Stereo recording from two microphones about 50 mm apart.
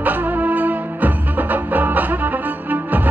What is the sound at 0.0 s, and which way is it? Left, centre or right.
Music, right.